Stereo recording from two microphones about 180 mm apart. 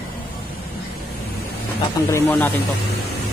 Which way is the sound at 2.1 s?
10° left (ahead or behind).